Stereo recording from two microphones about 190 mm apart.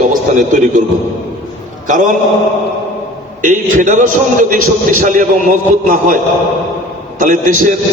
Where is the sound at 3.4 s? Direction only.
40° right (ahead or behind).